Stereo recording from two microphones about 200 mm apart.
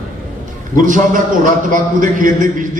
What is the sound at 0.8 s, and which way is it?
A man's voice, 40° right (ahead or behind).